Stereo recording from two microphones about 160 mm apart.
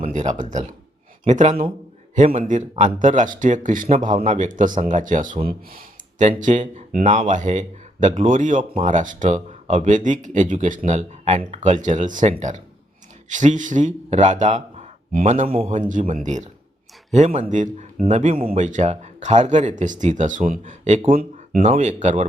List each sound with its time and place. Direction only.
0.0 s speech: 50° right (ahead or behind); by 6.2 s 65° right (ahead or behind)
6.2 s speech: 50° right (ahead or behind)